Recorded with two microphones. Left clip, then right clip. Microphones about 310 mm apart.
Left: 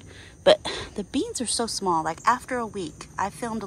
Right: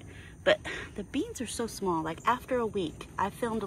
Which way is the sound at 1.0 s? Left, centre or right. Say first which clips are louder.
Left 6 dB; centre.